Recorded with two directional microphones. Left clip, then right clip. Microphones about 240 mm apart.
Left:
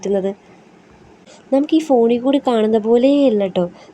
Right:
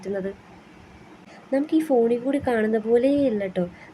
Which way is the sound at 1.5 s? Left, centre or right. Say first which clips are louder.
Left 7 dB; left.